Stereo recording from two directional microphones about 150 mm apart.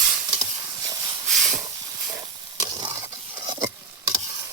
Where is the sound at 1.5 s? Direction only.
20° right (ahead or behind).